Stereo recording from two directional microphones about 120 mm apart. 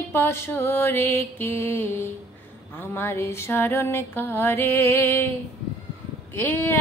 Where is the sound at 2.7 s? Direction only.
15° left (ahead or behind).